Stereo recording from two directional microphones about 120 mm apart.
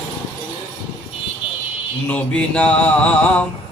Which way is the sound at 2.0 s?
10° left (ahead or behind).